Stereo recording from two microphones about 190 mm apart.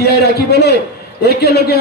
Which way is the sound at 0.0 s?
55° left (ahead or behind).